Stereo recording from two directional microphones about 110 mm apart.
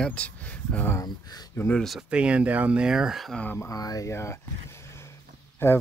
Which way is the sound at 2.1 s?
10° right (ahead or behind).